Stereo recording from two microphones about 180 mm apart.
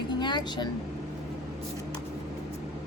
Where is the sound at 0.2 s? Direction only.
25° left (ahead or behind).